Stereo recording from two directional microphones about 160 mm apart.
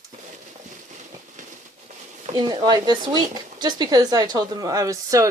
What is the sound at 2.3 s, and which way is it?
Speech, 25° right (ahead or behind).